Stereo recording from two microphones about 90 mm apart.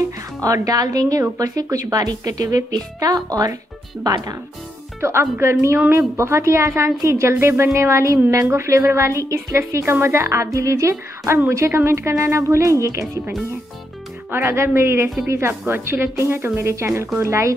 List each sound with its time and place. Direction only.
0.4 s a woman's voice: 40° right (ahead or behind)
5.0 s a woman's voice: 30° right (ahead or behind)
14.3 s a woman's voice: 30° right (ahead or behind)